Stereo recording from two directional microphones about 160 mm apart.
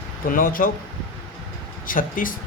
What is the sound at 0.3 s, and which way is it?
Speech, 60° left (ahead or behind).